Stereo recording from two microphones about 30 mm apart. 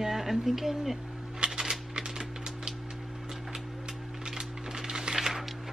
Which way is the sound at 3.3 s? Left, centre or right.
Right.